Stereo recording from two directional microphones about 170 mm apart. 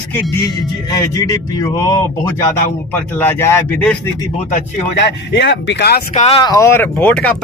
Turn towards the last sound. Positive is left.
turn(degrees=10)  # may be behind; listen again after turning